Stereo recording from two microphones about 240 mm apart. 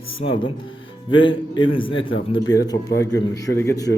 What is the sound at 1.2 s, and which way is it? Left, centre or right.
A man's voice, left.